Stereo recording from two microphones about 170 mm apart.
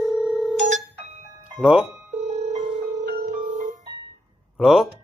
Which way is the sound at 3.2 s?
50° right (ahead or behind).